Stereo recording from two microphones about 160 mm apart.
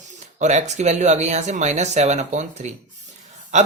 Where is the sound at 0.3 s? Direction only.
50° right (ahead or behind).